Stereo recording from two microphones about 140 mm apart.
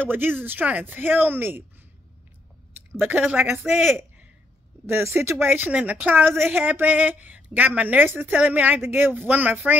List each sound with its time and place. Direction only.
0.0 s speech: 15° right (ahead or behind)
3.0 s speech: 10° right (ahead or behind)
4.8 s speech: 15° right (ahead or behind)